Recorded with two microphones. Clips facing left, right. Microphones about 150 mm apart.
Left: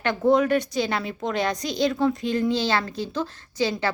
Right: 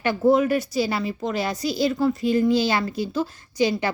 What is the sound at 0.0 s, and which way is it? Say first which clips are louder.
Speech: right 1 dB; 5° right (ahead or behind).